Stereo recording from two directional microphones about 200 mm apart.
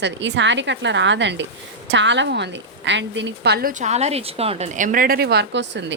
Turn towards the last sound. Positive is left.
turn(degrees=-60)  # may be behind; listen again after turning